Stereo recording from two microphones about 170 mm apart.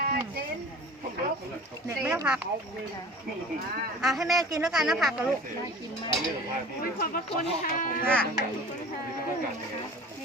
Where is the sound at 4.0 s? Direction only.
Centre (ahead or behind).